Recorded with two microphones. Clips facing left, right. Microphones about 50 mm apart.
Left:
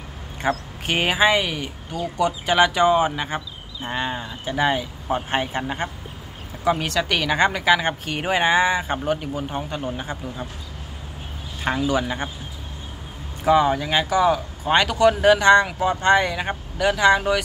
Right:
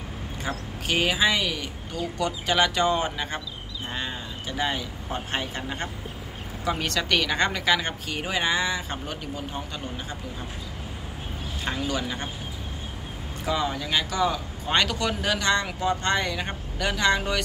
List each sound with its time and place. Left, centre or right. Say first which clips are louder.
0.4 s speech: left 6 dB; left; by 3.4 s centre
3.8 s speech: left 7 dB; left
6.6 s speech: left 6 dB; centre
8.1 s speech: left 6 dB; left
11.6 s speech: left 7 dB; left
13.5 s speech: left 9 dB; left